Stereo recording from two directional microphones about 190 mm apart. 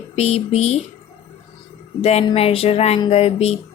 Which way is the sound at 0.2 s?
30° left (ahead or behind).